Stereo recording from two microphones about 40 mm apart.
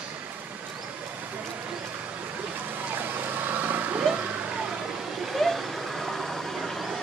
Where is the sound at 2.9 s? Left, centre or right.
Right.